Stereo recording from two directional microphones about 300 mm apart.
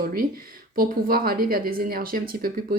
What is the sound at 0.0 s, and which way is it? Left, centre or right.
Speech, right.